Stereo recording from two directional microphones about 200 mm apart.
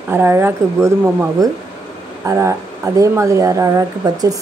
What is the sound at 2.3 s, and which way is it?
Speech, 15° right (ahead or behind).